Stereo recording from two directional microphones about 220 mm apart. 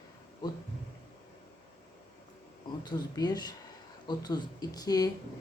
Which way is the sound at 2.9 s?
20° left (ahead or behind).